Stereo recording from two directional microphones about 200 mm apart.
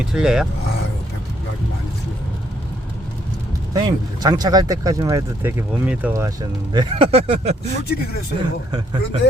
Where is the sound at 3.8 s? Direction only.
20° right (ahead or behind).